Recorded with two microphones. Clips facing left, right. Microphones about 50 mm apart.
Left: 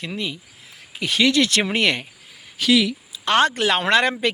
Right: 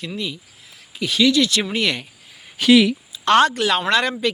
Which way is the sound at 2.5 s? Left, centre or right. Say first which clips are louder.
Right 5 dB; right.